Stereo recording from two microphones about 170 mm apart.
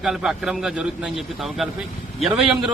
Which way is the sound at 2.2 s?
Centre (ahead or behind).